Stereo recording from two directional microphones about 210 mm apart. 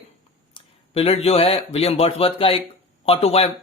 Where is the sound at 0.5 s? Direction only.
30° left (ahead or behind).